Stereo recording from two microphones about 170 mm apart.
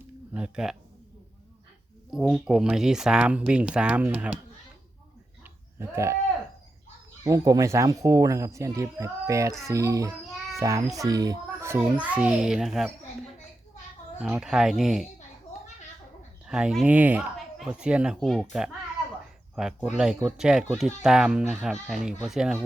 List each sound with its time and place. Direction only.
0.3 s speech: 5° right (ahead or behind)
2.0 s speech: 5° right (ahead or behind)
5.8 s speech: 15° right (ahead or behind)
7.3 s a child's voice: 20° right (ahead or behind)
12.1 s speech: 10° right (ahead or behind)
16.5 s speech: 5° right (ahead or behind)
19.5 s speech: 5° right (ahead or behind)